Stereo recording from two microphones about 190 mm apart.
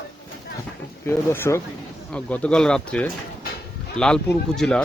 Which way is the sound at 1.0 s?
15° left (ahead or behind).